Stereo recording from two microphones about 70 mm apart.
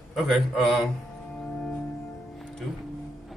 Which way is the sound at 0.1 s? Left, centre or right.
Centre.